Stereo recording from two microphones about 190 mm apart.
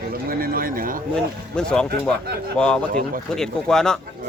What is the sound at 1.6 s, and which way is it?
Speech, 5° left (ahead or behind).